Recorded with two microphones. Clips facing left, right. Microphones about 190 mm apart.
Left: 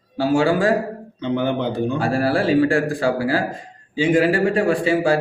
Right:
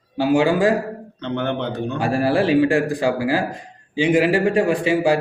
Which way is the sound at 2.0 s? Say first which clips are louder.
Right 3 dB; 20° right (ahead or behind).